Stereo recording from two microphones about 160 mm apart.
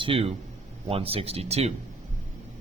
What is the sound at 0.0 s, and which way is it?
Speech, 35° right (ahead or behind).